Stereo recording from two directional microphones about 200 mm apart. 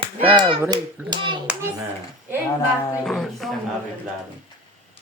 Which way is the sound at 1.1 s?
25° right (ahead or behind).